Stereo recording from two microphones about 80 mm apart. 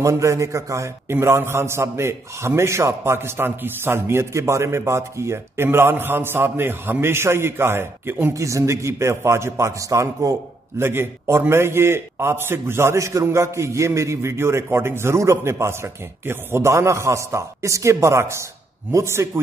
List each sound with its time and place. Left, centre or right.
0.0 s a man's voice: right
10.8 s a man's voice: right